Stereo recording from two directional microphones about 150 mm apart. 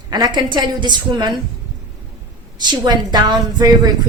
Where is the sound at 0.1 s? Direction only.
30° right (ahead or behind).